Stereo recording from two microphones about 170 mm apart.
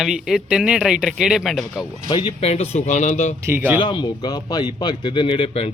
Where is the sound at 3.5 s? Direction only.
10° right (ahead or behind).